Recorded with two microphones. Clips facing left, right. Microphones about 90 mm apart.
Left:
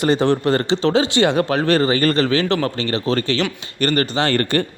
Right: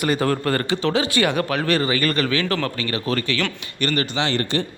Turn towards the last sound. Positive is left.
turn(degrees=50)  # may be behind; listen again after turning